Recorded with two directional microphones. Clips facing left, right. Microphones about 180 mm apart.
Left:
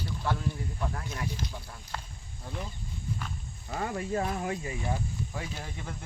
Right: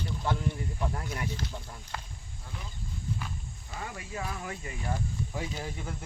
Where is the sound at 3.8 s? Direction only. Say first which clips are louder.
Left 8 dB; 45° left (ahead or behind).